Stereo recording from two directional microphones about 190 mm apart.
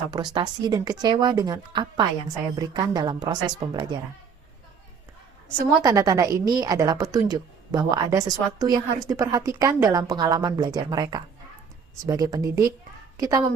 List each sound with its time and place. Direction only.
0.1 s speech: 20° right (ahead or behind)
5.8 s a woman's voice: 20° right (ahead or behind)